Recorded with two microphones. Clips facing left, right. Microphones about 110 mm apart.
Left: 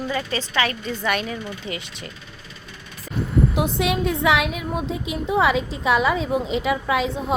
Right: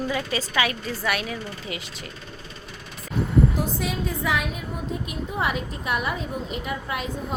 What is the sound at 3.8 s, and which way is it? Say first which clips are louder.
A woman's voice: left 6 dB; 75° left (ahead or behind).